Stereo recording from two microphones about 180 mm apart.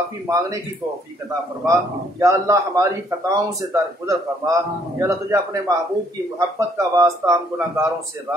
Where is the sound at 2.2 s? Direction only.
15° right (ahead or behind).